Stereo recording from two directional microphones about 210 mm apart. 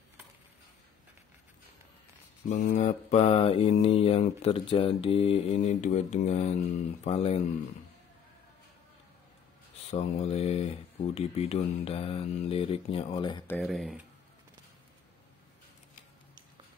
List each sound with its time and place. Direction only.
2.5 s mantra: 35° left (ahead or behind)
3.8 s speech: 30° left (ahead or behind)
9.8 s speech: 30° left (ahead or behind)
13.5 s speech: 5° left (ahead or behind)